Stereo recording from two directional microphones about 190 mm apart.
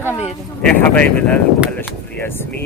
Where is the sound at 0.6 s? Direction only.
5° left (ahead or behind).